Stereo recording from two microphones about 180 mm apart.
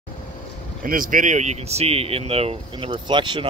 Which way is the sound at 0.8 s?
50° right (ahead or behind).